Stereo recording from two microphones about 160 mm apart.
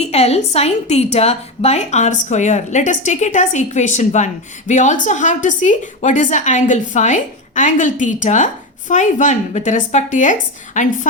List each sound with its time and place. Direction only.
0.0 s a woman's voice: 40° left (ahead or behind)